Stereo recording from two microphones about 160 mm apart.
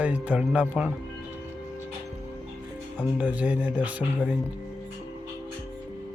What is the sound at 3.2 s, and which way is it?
Speech, 10° right (ahead or behind).